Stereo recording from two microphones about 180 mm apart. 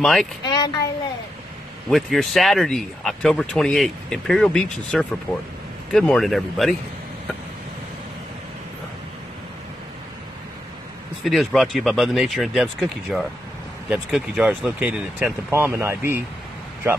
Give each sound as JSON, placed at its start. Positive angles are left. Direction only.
{"t": 0.0, "sound": "speech", "side_deg": 0}
{"t": 0.5, "sound": "a child's voice", "side_deg": 20}
{"t": 1.9, "sound": "speech", "side_deg": 0}
{"t": 11.2, "sound": "speech", "side_deg": 0}